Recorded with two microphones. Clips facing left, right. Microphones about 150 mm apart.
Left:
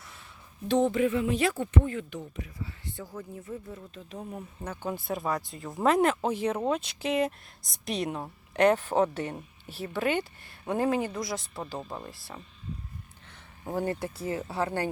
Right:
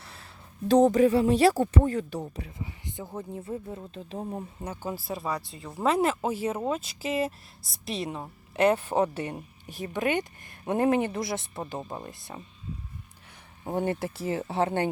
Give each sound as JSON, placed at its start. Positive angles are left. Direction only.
{"t": 0.0, "sound": "a sound", "side_deg": -35}
{"t": 0.7, "sound": "speech", "side_deg": -40}
{"t": 2.6, "sound": "speech", "side_deg": -20}
{"t": 4.6, "sound": "speech", "side_deg": -10}
{"t": 13.7, "sound": "speech", "side_deg": -25}